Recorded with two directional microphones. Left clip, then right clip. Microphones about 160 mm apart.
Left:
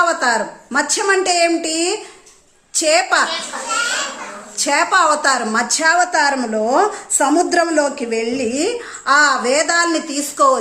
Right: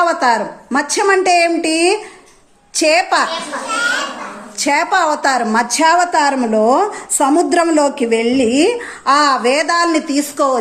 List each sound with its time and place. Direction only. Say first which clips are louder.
0.0 s a woman's voice: right 2 dB; 10° right (ahead or behind)
4.5 s a woman's voice: right 1 dB; 10° right (ahead or behind)